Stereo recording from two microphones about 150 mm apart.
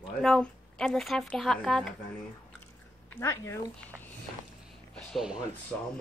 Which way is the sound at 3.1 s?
15° left (ahead or behind).